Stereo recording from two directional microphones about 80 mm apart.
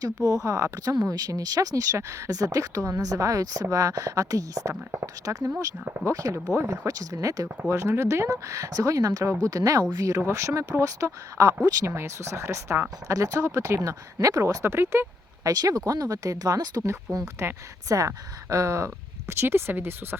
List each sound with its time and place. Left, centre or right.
0.0 s speech: right
4.7 s speech: right
5.2 s speech: right
7.7 s speech: right
15.4 s speech: right
16.8 s speech: right